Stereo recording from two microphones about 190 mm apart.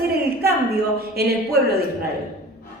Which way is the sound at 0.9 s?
55° right (ahead or behind).